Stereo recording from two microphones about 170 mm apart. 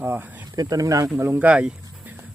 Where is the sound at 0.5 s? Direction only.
20° right (ahead or behind).